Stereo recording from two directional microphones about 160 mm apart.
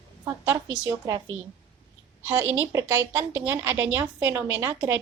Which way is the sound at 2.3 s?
15° right (ahead or behind).